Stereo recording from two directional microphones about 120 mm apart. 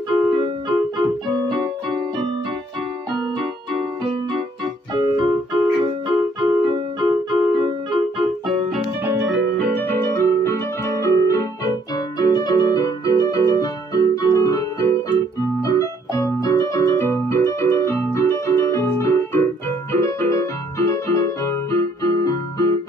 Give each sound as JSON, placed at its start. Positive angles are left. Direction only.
{"t": 0.1, "sound": "music", "side_deg": -40}
{"t": 4.9, "sound": "keyboard", "side_deg": -40}
{"t": 9.7, "sound": "keyboard", "side_deg": 15}